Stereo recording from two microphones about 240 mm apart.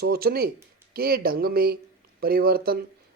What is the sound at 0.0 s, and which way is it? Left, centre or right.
Speech, right.